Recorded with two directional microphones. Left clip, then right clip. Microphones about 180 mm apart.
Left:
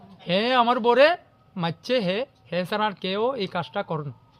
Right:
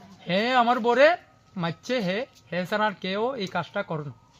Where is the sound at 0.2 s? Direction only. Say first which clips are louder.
Left 1 dB; 25° left (ahead or behind).